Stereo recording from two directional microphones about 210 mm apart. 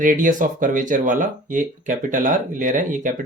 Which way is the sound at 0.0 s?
40° right (ahead or behind).